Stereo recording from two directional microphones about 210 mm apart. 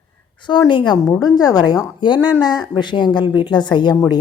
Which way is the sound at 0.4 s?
20° left (ahead or behind).